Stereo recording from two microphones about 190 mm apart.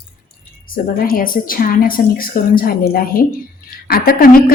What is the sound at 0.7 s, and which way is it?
A woman's voice, 50° left (ahead or behind).